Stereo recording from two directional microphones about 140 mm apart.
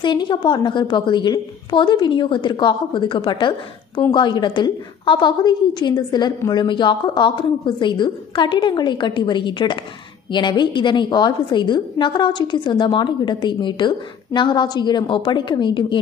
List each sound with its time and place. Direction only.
0.0 s a woman's voice: 35° left (ahead or behind)